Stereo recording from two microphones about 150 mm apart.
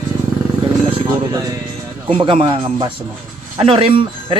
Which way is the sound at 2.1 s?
35° right (ahead or behind).